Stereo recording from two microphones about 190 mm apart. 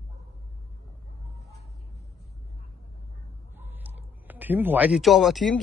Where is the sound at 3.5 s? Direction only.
10° right (ahead or behind).